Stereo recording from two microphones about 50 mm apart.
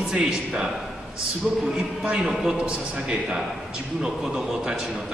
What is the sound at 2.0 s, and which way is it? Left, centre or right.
Speech, centre.